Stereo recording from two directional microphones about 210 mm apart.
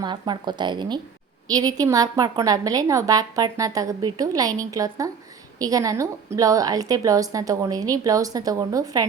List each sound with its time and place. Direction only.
0.0 s a woman's voice: 20° right (ahead or behind)